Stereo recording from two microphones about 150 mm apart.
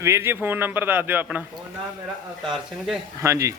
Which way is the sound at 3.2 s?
20° right (ahead or behind).